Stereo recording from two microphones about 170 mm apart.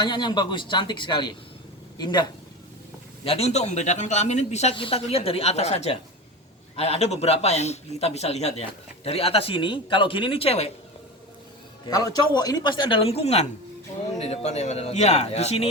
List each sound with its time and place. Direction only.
0.0 s speech: 25° left (ahead or behind)
3.2 s speech: 40° left (ahead or behind)
11.9 s speech: 20° left (ahead or behind); by 15.5 s 40° left (ahead or behind)